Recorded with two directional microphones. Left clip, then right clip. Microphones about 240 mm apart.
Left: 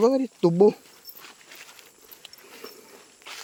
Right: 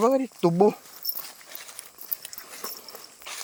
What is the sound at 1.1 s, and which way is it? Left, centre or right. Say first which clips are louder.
Dog: right 2 dB; right.